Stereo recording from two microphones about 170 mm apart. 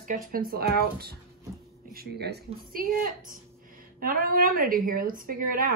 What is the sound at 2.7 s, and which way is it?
A woman's voice, 55° right (ahead or behind).